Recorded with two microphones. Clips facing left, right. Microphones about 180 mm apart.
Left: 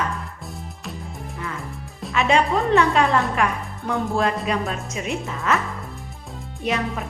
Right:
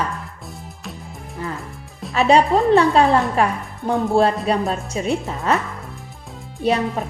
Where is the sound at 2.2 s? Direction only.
35° right (ahead or behind).